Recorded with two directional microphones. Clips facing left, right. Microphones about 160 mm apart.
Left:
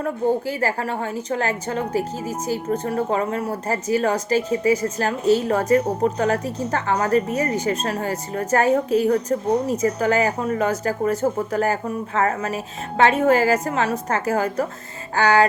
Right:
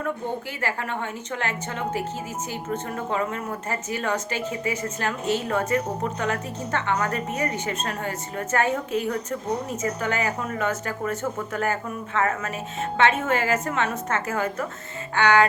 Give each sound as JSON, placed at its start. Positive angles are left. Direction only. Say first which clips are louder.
{"t": 0.0, "sound": "a woman's voice", "louder": "left 7 dB", "side_deg": 35}